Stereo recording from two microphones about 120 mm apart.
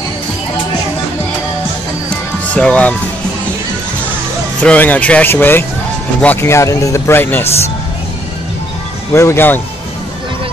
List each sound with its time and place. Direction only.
2.0 s music: 10° left (ahead or behind)
4.6 s speech: 10° left (ahead or behind)
9.1 s speech: 25° left (ahead or behind)